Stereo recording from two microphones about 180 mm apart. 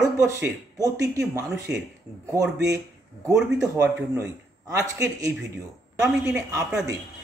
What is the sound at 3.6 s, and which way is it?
A man's voice, 20° right (ahead or behind).